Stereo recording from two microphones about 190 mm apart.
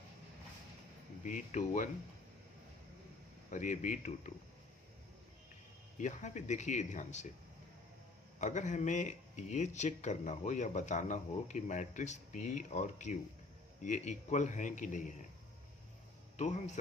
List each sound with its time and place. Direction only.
1.2 s speech: 40° left (ahead or behind)
3.5 s speech: 40° left (ahead or behind)
6.0 s speech: 40° left (ahead or behind)
8.4 s speech: 40° left (ahead or behind)
16.4 s speech: 40° left (ahead or behind)